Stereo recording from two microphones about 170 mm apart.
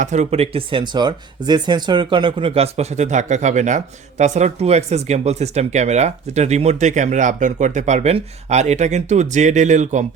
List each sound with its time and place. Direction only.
0.0 s speech: 45° right (ahead or behind)